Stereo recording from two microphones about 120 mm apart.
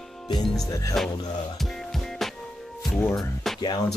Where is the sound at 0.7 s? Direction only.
30° left (ahead or behind).